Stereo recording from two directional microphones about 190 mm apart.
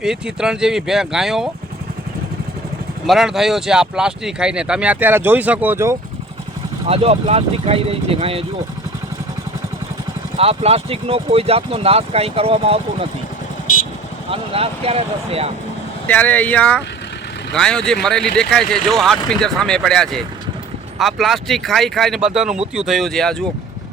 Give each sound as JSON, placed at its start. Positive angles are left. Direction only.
{"t": 0.0, "sound": "speech", "side_deg": -5}
{"t": 3.1, "sound": "speech", "side_deg": 0}
{"t": 6.8, "sound": "speech", "side_deg": -30}
{"t": 10.3, "sound": "speech", "side_deg": -30}
{"t": 14.3, "sound": "speech", "side_deg": -30}
{"t": 16.0, "sound": "speech", "side_deg": 10}